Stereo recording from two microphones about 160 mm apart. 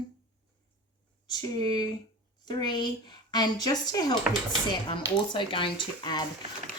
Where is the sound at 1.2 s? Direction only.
25° left (ahead or behind).